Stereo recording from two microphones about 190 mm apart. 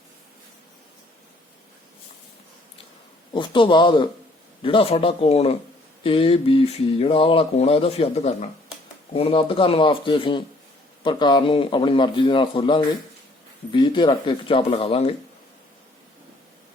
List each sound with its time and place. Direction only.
3.3 s a man's voice: 25° left (ahead or behind)